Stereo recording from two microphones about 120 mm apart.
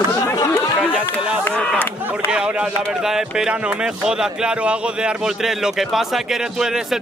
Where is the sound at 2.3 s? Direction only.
10° right (ahead or behind).